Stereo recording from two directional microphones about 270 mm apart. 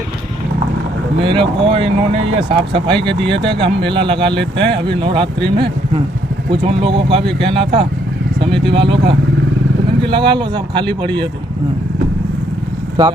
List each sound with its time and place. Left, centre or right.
1.2 s speech: centre
6.5 s speech: centre
13.0 s speech: centre